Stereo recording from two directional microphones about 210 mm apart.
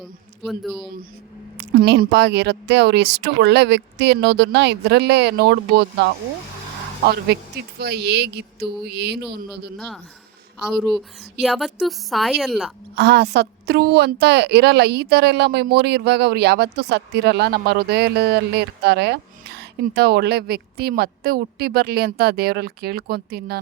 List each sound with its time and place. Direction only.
0.0 s a man's voice: centre (ahead or behind)
1.5 s a woman's voice: 55° right (ahead or behind)
7.8 s a woman's voice: 50° right (ahead or behind)
9.7 s a woman's voice: centre (ahead or behind)
13.0 s a woman's voice: 50° right (ahead or behind)